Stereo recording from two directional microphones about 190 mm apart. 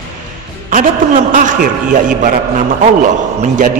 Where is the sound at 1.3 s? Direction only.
45° right (ahead or behind).